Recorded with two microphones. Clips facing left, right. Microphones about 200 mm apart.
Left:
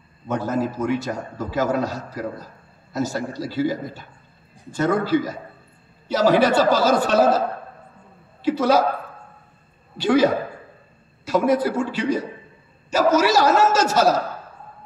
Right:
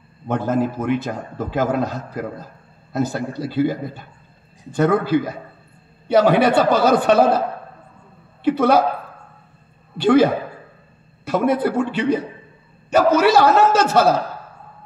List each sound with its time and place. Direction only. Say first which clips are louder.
0.5 s a man's voice: right 3 dB; 55° right (ahead or behind)
9.9 s a man's voice: right 3 dB; 55° right (ahead or behind)